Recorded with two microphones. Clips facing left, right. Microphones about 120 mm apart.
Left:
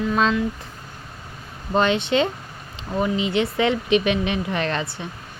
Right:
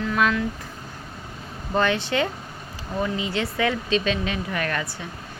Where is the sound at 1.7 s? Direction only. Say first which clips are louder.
Left 3 dB; 20° left (ahead or behind).